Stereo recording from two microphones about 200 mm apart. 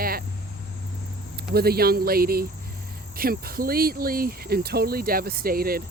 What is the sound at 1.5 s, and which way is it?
Speech, 50° right (ahead or behind).